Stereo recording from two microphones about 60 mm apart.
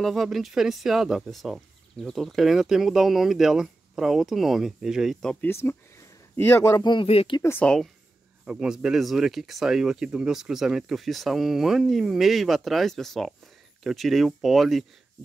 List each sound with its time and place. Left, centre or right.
0.0 s speech: centre
5.5 s speech: left
7.6 s speech: centre
8.5 s a man's voice: centre